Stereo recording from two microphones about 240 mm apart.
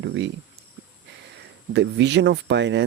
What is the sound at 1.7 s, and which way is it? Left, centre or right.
Speech, right.